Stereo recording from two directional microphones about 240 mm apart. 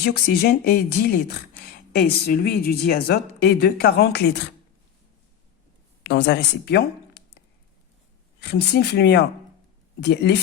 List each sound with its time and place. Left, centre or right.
0.0 s speech: left
6.0 s speech: left